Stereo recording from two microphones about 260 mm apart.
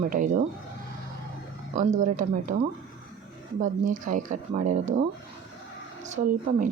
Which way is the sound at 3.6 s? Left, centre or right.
Right.